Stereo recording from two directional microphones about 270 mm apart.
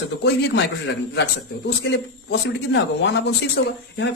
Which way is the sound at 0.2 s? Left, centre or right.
Left.